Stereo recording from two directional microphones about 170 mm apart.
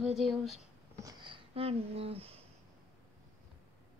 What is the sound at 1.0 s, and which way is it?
Speech, 30° right (ahead or behind).